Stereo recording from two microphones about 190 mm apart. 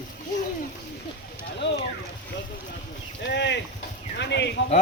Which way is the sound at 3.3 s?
65° left (ahead or behind).